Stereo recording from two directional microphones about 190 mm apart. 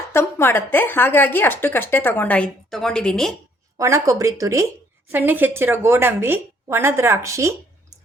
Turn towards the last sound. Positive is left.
turn(degrees=-15)  # may be behind; listen again after turning